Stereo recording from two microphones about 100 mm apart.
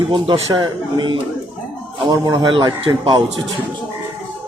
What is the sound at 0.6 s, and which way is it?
Speech, 50° right (ahead or behind).